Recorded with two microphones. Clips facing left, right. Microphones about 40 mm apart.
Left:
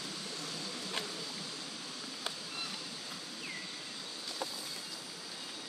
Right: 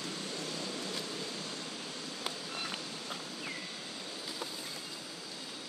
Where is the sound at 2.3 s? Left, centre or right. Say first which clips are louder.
Right 2 dB; right.